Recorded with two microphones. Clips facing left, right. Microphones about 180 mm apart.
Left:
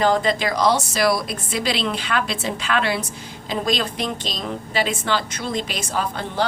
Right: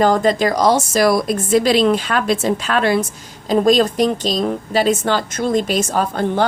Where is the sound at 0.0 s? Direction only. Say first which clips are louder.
Right 5 dB; 45° right (ahead or behind).